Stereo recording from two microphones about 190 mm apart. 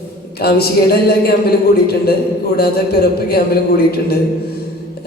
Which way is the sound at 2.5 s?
55° left (ahead or behind).